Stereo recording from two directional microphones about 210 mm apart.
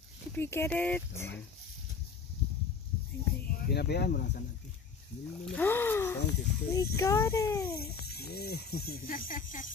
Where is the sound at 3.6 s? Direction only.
50° left (ahead or behind).